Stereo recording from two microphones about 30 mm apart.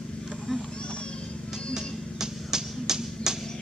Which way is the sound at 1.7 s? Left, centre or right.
Centre.